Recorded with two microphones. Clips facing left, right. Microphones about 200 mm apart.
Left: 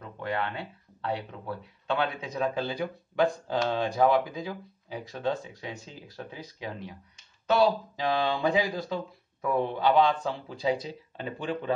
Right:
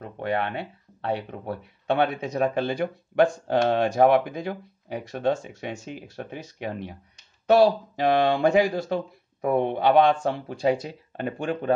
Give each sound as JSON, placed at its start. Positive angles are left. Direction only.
{"t": 0.0, "sound": "speech", "side_deg": -60}
{"t": 8.9, "sound": "speech", "side_deg": -55}